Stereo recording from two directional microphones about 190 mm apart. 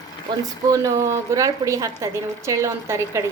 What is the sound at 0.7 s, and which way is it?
A woman's voice, 15° right (ahead or behind).